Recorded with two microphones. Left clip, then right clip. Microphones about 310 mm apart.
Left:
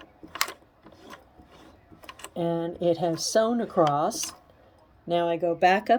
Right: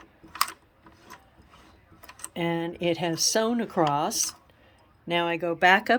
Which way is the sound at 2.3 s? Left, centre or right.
Centre.